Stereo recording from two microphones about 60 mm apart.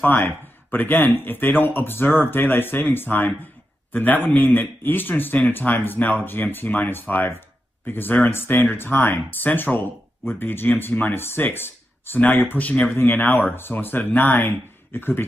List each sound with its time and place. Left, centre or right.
0.0 s speech: left
12.6 s speech: left
12.9 s speech: left